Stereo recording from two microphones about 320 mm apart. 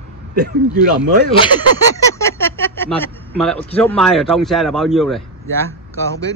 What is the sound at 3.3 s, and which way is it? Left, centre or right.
A man's voice, centre.